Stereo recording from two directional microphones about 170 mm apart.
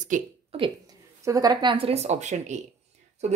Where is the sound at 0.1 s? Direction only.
50° right (ahead or behind).